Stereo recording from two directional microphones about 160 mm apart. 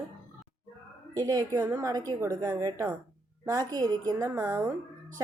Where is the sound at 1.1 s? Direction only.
25° right (ahead or behind).